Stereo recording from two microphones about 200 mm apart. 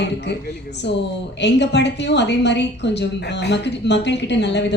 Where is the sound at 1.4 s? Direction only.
60° left (ahead or behind).